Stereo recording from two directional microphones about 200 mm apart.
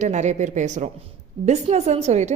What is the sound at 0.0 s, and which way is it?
A woman's voice, 35° right (ahead or behind).